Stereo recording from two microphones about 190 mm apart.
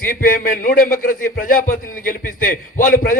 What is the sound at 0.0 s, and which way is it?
A man's voice, 50° left (ahead or behind).